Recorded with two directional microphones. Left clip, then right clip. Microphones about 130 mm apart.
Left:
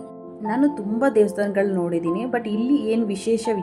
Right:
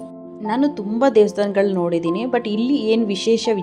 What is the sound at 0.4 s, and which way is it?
A woman's voice, 30° right (ahead or behind).